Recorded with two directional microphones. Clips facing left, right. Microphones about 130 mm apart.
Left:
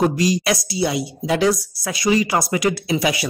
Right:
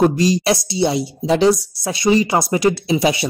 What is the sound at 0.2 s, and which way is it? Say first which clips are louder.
A woman's voice: right 3 dB; 25° right (ahead or behind).